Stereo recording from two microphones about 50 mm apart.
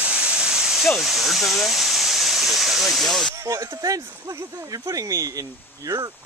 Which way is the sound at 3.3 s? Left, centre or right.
Right.